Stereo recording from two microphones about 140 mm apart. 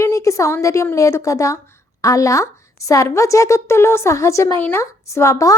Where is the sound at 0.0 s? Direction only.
20° left (ahead or behind).